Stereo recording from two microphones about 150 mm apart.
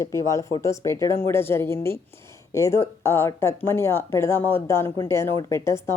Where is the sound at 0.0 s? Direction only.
20° left (ahead or behind).